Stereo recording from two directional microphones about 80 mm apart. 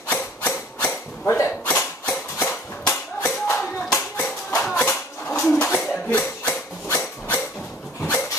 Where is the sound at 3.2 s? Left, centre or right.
Left.